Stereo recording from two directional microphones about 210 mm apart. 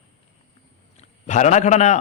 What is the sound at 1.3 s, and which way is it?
Speech, 35° left (ahead or behind).